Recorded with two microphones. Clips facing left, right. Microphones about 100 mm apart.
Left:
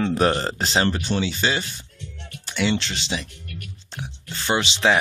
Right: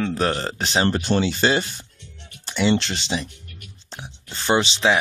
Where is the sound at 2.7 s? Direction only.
45° right (ahead or behind).